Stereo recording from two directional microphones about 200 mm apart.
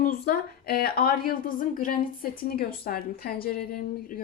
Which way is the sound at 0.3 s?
50° left (ahead or behind).